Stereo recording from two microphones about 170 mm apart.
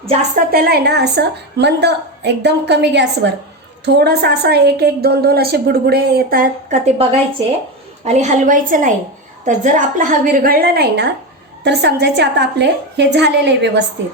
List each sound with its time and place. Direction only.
0.5 s a woman's voice: 65° right (ahead or behind); by 3.3 s 90° right
3.8 s a woman's voice: 75° right (ahead or behind); by 6.7 s 60° right (ahead or behind)
6.8 s a woman's voice: 35° right (ahead or behind); by 13.8 s 90° right